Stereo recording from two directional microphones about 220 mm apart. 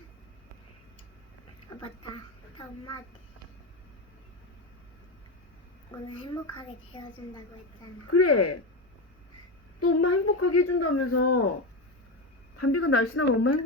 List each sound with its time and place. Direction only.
1.7 s a sound: 15° left (ahead or behind)
2.6 s a child's voice: 15° left (ahead or behind)
6.1 s a woman's voice: 20° left (ahead or behind)
8.1 s speech: 90° left
9.8 s speech: 90° left
12.5 s speech: 90° left